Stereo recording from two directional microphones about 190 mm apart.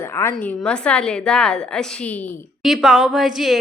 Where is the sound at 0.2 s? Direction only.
10° left (ahead or behind).